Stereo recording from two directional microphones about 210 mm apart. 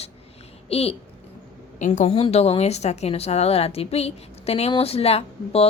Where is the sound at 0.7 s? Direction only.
30° left (ahead or behind).